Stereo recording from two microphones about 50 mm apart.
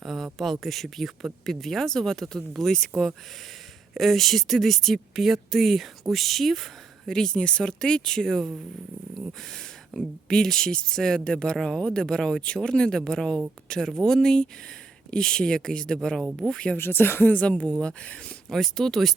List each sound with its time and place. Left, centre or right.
0.0 s a sound: centre
0.3 s speech: centre
3.9 s speech: centre
7.1 s speech: centre
9.9 s speech: centre
10.2 s speech: centre
16.0 s speech: centre
16.4 s speech: right
16.7 s speech: left
17.4 s speech: left
18.5 s speech: centre